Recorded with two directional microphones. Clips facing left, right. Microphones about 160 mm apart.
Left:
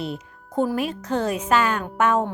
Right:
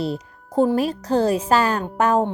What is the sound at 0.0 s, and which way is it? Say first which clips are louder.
A woman's voice: right 5 dB; 35° right (ahead or behind).